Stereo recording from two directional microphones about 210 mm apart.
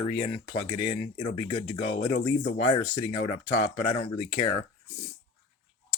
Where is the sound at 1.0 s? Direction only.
40° left (ahead or behind).